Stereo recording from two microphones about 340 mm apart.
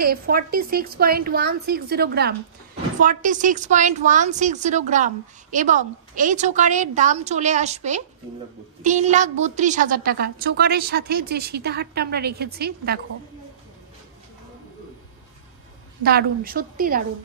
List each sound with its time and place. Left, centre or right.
0.0 s a woman's voice: right
16.0 s a woman's voice: right